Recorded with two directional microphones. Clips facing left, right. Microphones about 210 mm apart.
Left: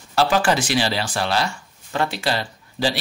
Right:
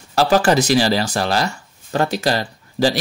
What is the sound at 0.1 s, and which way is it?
Speech, 40° right (ahead or behind).